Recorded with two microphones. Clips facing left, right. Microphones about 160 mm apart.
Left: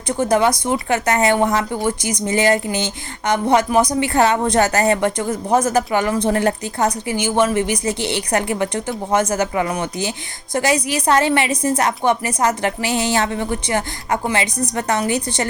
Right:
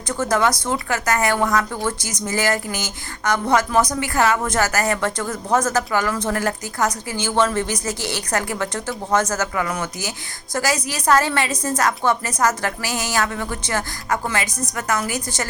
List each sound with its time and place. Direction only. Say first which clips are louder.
0.2 s a woman's voice: left 3 dB; 15° left (ahead or behind)
7.1 s a woman's voice: left 3 dB; 15° left (ahead or behind)
14.6 s a woman's voice: left 4 dB; 35° left (ahead or behind)
14.9 s speech: left 5 dB; 25° left (ahead or behind)